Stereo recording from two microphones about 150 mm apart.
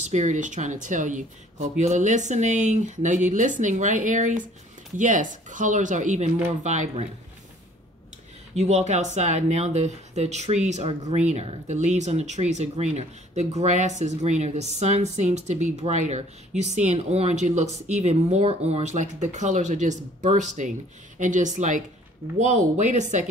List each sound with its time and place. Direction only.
0.1 s speech: 50° right (ahead or behind)
8.5 s speech: 45° right (ahead or behind)